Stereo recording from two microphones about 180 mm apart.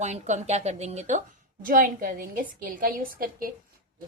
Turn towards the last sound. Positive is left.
turn(degrees=-50)  # may be behind; listen again after turning